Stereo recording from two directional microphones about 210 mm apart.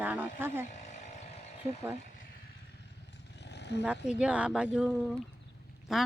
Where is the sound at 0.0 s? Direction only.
10° right (ahead or behind).